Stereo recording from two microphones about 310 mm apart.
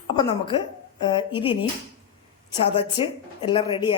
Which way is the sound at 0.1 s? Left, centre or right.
Centre.